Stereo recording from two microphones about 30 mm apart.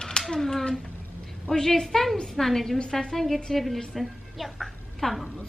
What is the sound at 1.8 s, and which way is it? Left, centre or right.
A woman's voice, centre.